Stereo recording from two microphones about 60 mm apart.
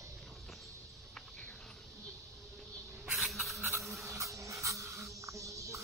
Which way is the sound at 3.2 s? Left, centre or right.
Centre.